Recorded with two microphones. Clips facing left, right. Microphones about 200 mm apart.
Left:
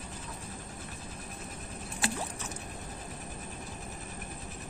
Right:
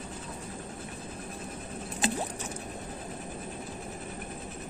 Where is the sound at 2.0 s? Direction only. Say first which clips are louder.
Right 4 dB; 20° right (ahead or behind).